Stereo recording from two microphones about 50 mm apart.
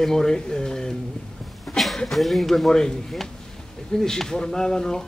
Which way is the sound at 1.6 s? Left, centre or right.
Centre.